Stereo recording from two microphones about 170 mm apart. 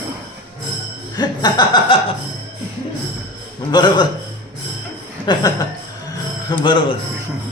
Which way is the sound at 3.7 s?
25° left (ahead or behind).